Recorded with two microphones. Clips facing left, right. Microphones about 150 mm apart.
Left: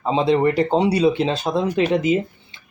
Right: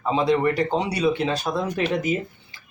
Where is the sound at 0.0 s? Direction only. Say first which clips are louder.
Left 3 dB; 30° left (ahead or behind).